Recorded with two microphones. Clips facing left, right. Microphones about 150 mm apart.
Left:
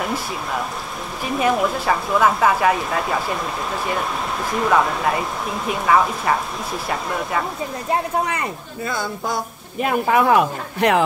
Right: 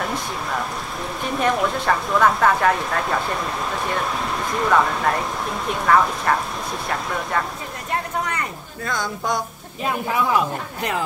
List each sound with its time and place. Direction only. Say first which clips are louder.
1.2 s speech: left 2 dB; 5° left (ahead or behind)
4.6 s speech: even; 5° left (ahead or behind)
8.8 s speech: even; 5° left (ahead or behind)
9.8 s speech: left 5 dB; 60° left (ahead or behind)